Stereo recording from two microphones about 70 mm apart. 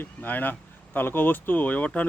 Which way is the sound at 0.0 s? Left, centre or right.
Left.